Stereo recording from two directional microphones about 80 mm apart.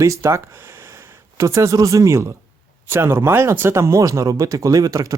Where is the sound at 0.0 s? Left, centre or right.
Right.